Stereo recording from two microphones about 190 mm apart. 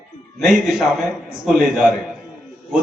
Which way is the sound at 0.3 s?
Centre (ahead or behind).